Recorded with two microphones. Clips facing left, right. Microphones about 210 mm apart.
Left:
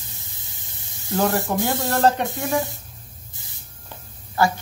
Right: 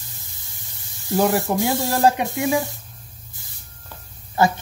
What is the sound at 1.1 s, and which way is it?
A woman's voice, 20° right (ahead or behind).